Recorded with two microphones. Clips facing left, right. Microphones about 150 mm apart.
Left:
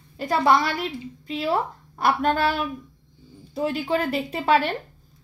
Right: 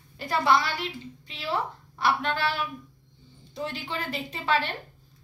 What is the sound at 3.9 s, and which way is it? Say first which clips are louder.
Speech: left 9 dB; 55° left (ahead or behind).